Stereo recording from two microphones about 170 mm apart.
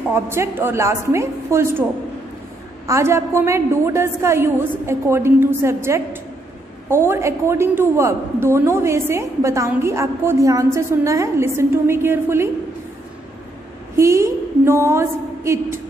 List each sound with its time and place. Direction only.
0.1 s a woman's voice: 15° right (ahead or behind)
2.9 s a woman's voice: 15° right (ahead or behind)
13.9 s a woman's voice: 15° right (ahead or behind)